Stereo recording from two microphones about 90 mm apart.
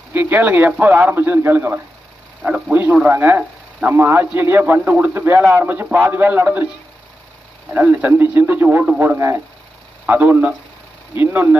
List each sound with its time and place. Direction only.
0.1 s speech: 20° right (ahead or behind)
7.7 s speech: 20° right (ahead or behind)